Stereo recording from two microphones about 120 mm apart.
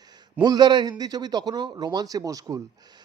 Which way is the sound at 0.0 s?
35° right (ahead or behind).